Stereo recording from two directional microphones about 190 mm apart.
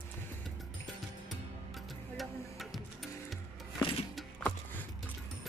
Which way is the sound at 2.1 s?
Centre (ahead or behind).